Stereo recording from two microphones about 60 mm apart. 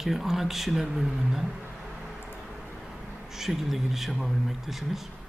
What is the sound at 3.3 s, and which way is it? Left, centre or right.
A man's voice, centre.